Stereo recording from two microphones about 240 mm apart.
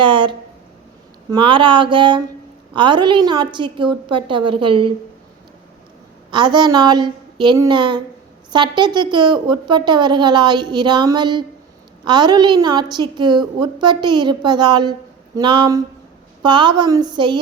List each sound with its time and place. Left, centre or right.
0.0 s a sound: right
1.3 s speech: right
6.3 s a woman's voice: centre